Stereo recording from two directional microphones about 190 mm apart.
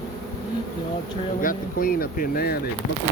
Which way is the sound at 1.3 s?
50° left (ahead or behind).